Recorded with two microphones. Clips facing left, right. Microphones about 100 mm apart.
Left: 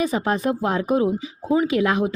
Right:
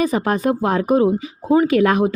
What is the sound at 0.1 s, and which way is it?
Speech, centre (ahead or behind).